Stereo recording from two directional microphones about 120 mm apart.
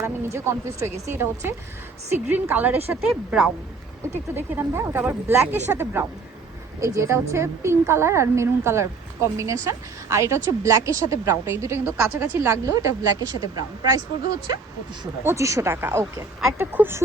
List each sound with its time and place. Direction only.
0.0 s a woman's voice: 20° right (ahead or behind)
4.1 s a woman's voice: 20° right (ahead or behind)
15.2 s a woman's voice: 25° right (ahead or behind)